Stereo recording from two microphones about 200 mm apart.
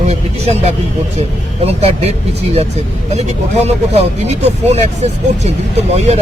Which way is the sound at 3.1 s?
30° right (ahead or behind).